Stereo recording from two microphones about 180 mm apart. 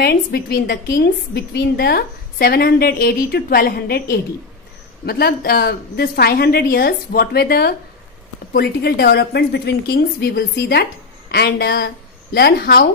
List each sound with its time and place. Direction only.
0.0 s a woman's voice: 60° left (ahead or behind)